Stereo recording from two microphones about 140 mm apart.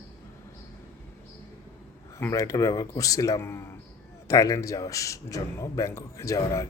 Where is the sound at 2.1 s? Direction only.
20° left (ahead or behind).